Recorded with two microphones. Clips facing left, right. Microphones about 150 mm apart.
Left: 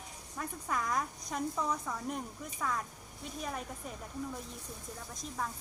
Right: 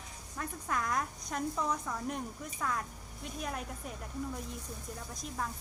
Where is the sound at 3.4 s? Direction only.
Centre (ahead or behind).